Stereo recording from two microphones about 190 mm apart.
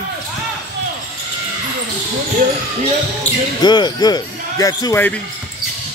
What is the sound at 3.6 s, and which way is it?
Speech, 20° left (ahead or behind).